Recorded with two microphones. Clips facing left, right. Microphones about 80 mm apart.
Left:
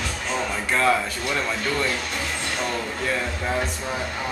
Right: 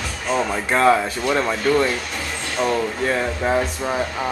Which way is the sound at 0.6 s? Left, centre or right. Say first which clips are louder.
Right 5 dB; right.